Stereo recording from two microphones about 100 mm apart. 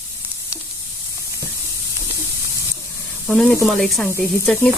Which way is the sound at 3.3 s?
10° left (ahead or behind).